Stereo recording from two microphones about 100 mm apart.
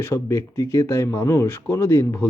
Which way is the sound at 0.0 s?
30° left (ahead or behind).